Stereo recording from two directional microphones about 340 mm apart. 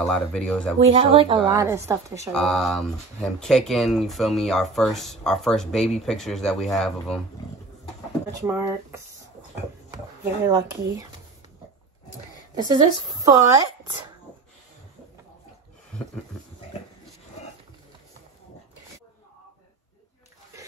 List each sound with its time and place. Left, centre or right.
0.0 s speech: centre
0.7 s a woman's voice: centre
8.4 s a woman's voice: centre
12.5 s a woman's voice: centre